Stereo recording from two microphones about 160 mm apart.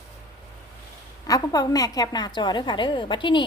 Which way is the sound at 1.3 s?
25° left (ahead or behind).